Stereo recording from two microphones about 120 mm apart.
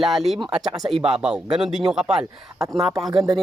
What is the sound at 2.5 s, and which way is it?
Speech, 25° right (ahead or behind).